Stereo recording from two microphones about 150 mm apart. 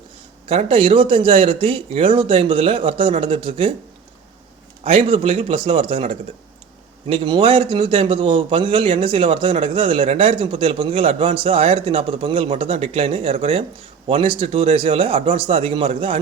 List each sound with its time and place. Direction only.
0.4 s a man's voice: 40° right (ahead or behind)
4.8 s a man's voice: 40° right (ahead or behind)